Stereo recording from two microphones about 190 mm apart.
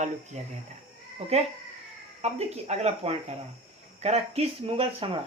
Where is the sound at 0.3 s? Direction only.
35° right (ahead or behind).